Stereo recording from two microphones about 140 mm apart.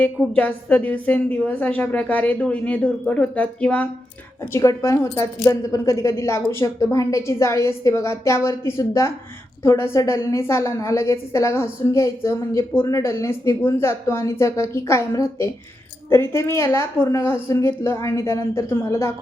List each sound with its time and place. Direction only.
0.3 s a woman's voice: 10° left (ahead or behind)
4.5 s a woman's voice: 20° left (ahead or behind)